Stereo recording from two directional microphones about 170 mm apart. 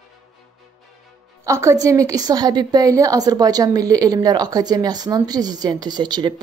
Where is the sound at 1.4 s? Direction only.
15° right (ahead or behind).